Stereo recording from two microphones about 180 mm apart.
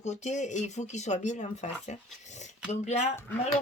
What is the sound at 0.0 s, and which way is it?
Speech, 40° left (ahead or behind).